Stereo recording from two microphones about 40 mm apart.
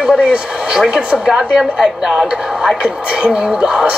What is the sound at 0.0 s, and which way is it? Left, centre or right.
A woman's voice, right.